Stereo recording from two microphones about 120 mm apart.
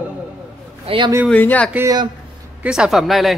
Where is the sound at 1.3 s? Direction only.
15° left (ahead or behind).